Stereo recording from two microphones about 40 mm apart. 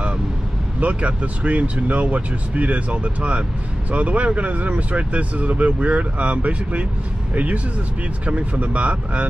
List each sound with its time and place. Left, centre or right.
0.7 s speech: right